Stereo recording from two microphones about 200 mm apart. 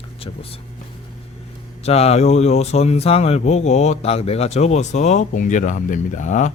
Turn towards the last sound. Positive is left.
turn(degrees=35)  # may be behind; listen again after turning